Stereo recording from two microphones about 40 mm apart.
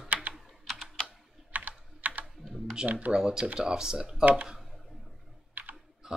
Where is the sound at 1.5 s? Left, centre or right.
Right.